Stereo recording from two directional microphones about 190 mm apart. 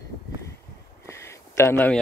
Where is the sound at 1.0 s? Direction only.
15° left (ahead or behind).